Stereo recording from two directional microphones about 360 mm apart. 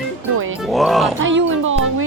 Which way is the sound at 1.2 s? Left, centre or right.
Right.